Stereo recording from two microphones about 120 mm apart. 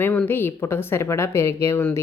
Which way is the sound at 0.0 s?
15° left (ahead or behind).